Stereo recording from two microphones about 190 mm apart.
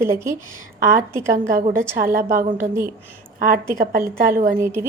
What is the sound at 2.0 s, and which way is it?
Speech, 50° right (ahead or behind).